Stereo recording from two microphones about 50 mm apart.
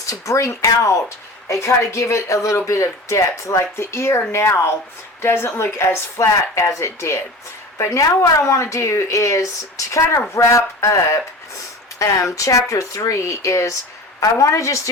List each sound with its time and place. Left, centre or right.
0.0 s speech: left
1.5 s a woman's voice: left
5.7 s speech: left
7.8 s speech: left
11.9 s speech: left